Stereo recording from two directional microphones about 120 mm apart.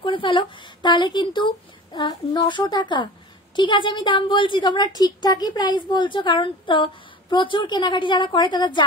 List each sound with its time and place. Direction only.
0.0 s a woman's voice: 45° left (ahead or behind)